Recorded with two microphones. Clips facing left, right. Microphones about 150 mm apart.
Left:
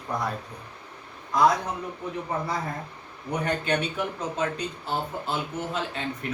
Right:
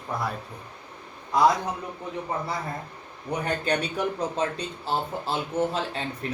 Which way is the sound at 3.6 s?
35° right (ahead or behind).